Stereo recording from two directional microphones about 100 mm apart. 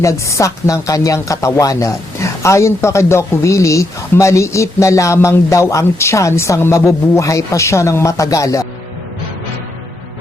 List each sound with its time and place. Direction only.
0.0 s speech: 30° left (ahead or behind)